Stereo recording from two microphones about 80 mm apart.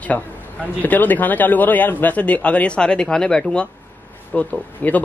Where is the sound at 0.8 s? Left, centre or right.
Left.